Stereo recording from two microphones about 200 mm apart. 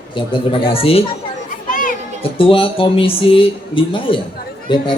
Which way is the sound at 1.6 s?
40° left (ahead or behind).